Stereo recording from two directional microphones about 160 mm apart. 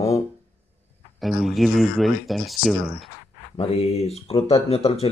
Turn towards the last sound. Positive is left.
turn(degrees=40)  # may be behind; listen again after turning